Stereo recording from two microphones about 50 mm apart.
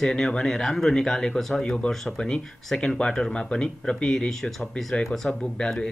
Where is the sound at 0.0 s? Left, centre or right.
Centre.